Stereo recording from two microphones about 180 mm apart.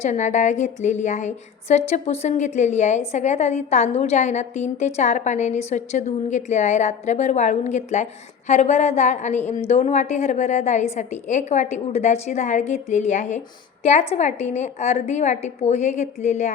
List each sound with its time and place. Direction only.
0.0 s a woman's voice: 40° left (ahead or behind)